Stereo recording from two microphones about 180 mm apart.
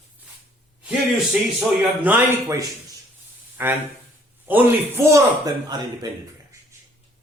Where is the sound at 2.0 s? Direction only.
15° right (ahead or behind).